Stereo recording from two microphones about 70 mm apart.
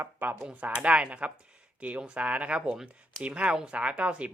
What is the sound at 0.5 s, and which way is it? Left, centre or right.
Speech, centre.